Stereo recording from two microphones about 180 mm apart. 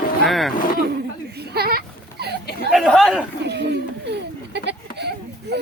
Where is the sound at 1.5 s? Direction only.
60° right (ahead or behind).